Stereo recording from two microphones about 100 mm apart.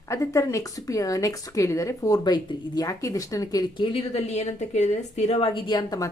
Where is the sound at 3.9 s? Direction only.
90° left.